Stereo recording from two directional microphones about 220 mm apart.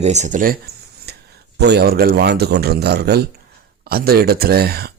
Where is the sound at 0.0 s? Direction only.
30° right (ahead or behind).